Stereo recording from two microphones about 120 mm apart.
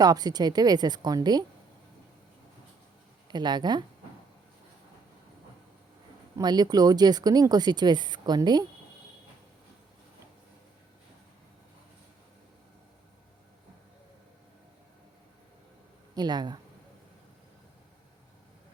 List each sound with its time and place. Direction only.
0.0 s speech: 35° right (ahead or behind)
3.2 s speech: 35° right (ahead or behind)
6.3 s speech: 35° right (ahead or behind)
16.1 s speech: 35° right (ahead or behind)